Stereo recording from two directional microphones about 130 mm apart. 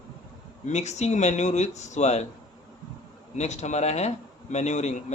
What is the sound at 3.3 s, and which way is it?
Speech, 60° left (ahead or behind).